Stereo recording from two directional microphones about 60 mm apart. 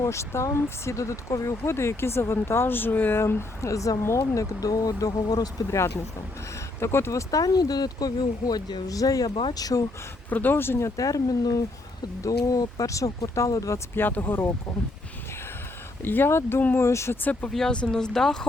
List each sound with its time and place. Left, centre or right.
0.0 s speech: left
3.2 s speech: left
3.7 s speech: left
4.4 s speech: left
6.7 s speech: left
7.1 s speech: left
10.2 s speech: left
10.8 s speech: left
13.9 s speech: left
16.0 s speech: left
16.7 s speech: left
17.5 s speech: centre